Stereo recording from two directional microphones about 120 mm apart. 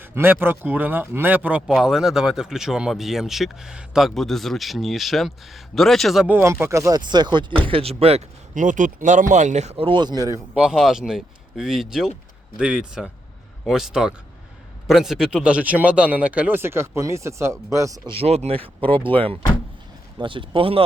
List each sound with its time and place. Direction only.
0.0 s speech: 20° right (ahead or behind); by 6.2 s centre (ahead or behind)
6.2 s speech: 20° right (ahead or behind); by 7.4 s 40° right (ahead or behind)
7.7 s speech: 55° right (ahead or behind); by 9.8 s 70° right (ahead or behind)
9.8 s speech: 40° right (ahead or behind)
10.5 s speech: 5° right (ahead or behind); by 18.0 s 25° right (ahead or behind)
18.2 s speech: 60° right (ahead or behind)